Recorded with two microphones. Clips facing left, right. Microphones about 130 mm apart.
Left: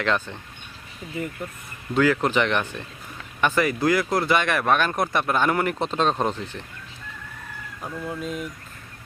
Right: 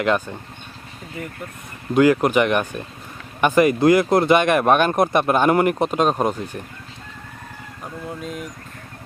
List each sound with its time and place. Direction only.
0.0 s speech: 10° right (ahead or behind)
1.9 s speech: 15° right (ahead or behind)
8.2 s speech: centre (ahead or behind)